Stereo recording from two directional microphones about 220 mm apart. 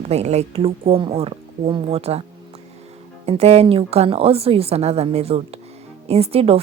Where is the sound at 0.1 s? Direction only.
30° right (ahead or behind).